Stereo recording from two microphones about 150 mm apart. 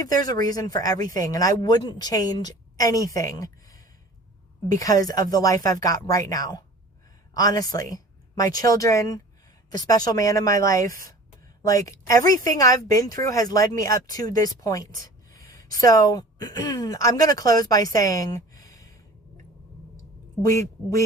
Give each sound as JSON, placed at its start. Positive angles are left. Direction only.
{"t": 0.0, "sound": "a woman's voice", "side_deg": 25}
{"t": 17.9, "sound": "a sound", "side_deg": 25}
{"t": 20.5, "sound": "speech", "side_deg": 20}